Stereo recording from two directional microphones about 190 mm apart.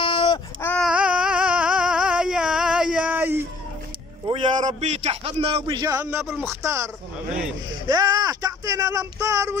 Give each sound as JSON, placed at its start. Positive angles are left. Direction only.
{"t": 0.0, "sound": "baby cry", "side_deg": 25}
{"t": 0.6, "sound": "baby cry", "side_deg": 10}
{"t": 0.8, "sound": "a sound", "side_deg": -5}
{"t": 4.6, "sound": "speech", "side_deg": -35}